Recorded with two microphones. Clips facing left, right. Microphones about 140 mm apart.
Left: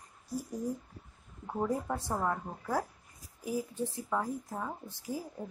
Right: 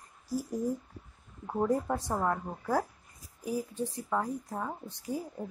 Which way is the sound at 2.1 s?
5° right (ahead or behind).